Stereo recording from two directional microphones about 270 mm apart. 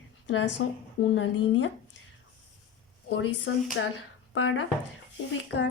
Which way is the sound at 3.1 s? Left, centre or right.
Left.